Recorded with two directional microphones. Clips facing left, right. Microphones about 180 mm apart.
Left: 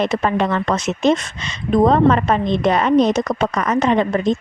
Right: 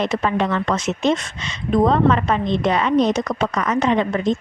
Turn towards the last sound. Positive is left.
turn(degrees=40)  # may be behind; listen again after turning